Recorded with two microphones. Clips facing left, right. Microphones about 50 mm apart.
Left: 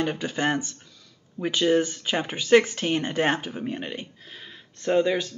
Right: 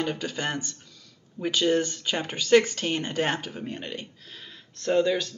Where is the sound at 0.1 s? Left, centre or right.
Left.